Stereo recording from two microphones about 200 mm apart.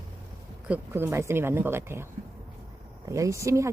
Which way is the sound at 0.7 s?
10° right (ahead or behind).